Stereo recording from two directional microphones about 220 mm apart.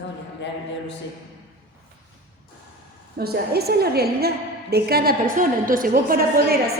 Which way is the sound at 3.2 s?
45° right (ahead or behind).